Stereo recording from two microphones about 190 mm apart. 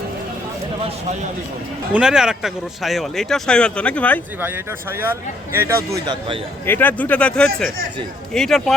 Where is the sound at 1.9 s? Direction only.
5° right (ahead or behind).